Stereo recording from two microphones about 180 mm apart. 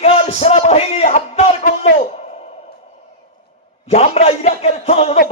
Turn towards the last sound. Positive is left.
turn(degrees=35)  # may be behind; listen again after turning